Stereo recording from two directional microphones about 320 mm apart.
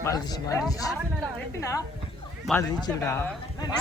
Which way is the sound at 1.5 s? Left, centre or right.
Centre.